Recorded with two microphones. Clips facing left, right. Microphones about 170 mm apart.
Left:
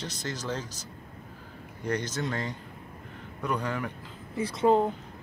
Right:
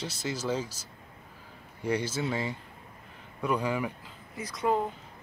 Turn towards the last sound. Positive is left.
turn(degrees=25)  # may be behind; listen again after turning